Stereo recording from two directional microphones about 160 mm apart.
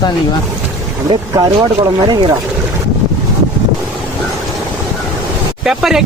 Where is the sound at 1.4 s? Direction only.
25° right (ahead or behind).